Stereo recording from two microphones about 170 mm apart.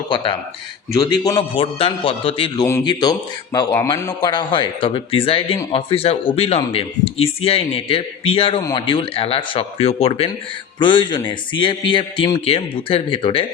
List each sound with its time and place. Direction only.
0.1 s a man's voice: 30° left (ahead or behind)